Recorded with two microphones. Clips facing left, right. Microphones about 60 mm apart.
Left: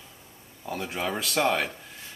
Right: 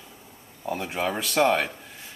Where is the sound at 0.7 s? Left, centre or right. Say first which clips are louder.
Right 2 dB; centre.